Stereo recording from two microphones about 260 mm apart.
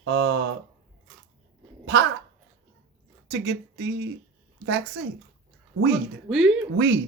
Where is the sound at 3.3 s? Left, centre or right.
Right.